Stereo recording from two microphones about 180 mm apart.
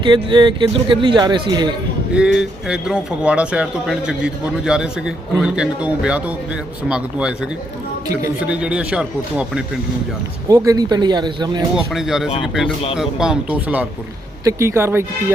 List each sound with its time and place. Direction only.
0.0 s speech: 25° right (ahead or behind)
2.1 s speech: 5° right (ahead or behind)
8.4 s speech: 5° right (ahead or behind)
10.5 s speech: 20° right (ahead or behind)
11.7 s speech: centre (ahead or behind)
12.6 s speech: 35° left (ahead or behind)
13.0 s speech: 5° right (ahead or behind)